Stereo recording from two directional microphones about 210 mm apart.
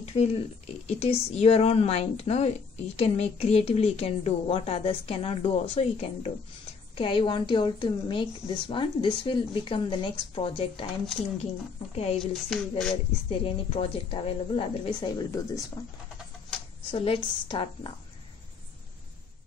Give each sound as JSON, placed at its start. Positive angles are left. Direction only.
{"t": 0.0, "sound": "a sound", "side_deg": 30}
{"t": 0.8, "sound": "a woman's voice", "side_deg": 30}
{"t": 11.9, "sound": "a woman's voice", "side_deg": 30}
{"t": 12.2, "sound": "speech", "side_deg": 0}
{"t": 13.3, "sound": "a woman's voice", "side_deg": 25}
{"t": 16.9, "sound": "a woman's voice", "side_deg": 25}